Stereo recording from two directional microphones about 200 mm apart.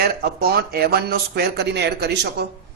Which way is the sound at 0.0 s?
50° right (ahead or behind).